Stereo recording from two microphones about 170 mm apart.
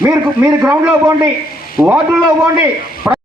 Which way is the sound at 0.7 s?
15° right (ahead or behind).